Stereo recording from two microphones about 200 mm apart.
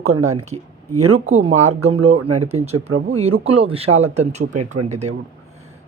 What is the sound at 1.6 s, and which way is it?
Speech, 30° right (ahead or behind).